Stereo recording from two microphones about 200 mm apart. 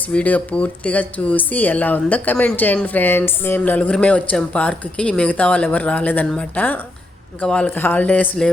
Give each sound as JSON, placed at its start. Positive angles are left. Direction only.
{"t": 0.1, "sound": "speech", "side_deg": 5}